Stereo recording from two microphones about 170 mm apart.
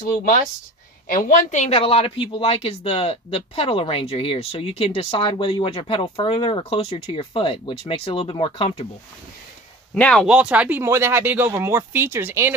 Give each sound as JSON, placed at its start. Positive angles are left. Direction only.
{"t": 0.1, "sound": "a woman's voice", "side_deg": 50}
{"t": 1.8, "sound": "speech", "side_deg": 35}
{"t": 9.9, "sound": "speech", "side_deg": 5}
{"t": 10.2, "sound": "speech", "side_deg": -5}